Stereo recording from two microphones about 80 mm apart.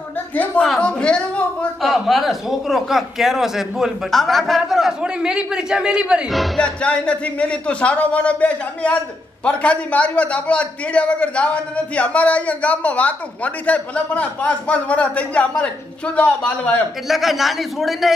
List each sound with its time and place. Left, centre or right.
0.7 s a man's voice: centre
1.8 s a man's voice: centre
6.3 s speech: centre
6.6 s a man's voice: centre
17.1 s speech: centre